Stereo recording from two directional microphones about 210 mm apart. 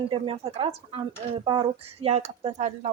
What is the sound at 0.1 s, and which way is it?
Speech, 25° right (ahead or behind).